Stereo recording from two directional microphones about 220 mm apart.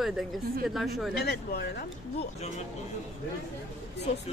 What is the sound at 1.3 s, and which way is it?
Speech, 45° left (ahead or behind).